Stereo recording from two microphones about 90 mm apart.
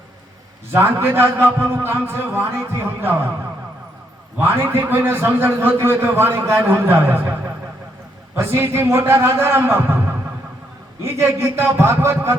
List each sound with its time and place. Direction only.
0.7 s a man's voice: 25° right (ahead or behind)
4.4 s a man's voice: 25° right (ahead or behind)